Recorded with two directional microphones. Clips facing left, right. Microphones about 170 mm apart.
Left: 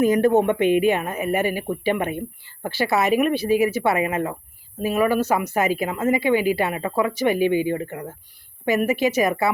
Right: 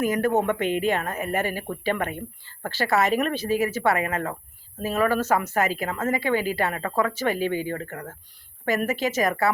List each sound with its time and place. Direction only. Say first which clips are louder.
0.0 s a woman's voice: left 5 dB; 25° left (ahead or behind)